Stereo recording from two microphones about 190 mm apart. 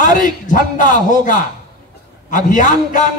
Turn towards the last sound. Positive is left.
turn(degrees=40)  # may be behind; listen again after turning